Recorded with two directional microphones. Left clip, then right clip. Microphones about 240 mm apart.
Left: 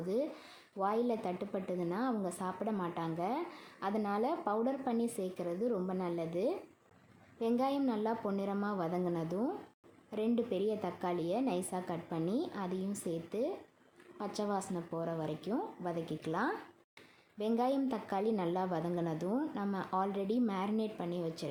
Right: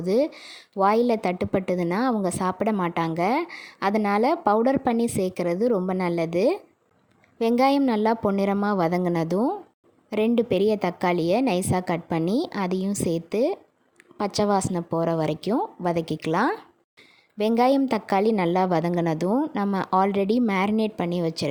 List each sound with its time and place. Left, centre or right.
0.0 s a woman's voice: right